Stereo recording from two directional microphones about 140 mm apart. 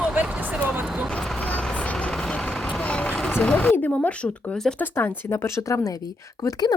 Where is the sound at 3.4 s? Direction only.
10° left (ahead or behind).